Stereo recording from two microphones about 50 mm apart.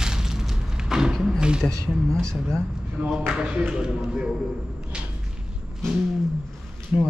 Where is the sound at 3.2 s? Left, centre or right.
Centre.